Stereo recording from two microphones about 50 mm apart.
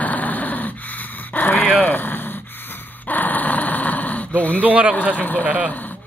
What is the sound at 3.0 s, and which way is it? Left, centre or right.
Dog, left.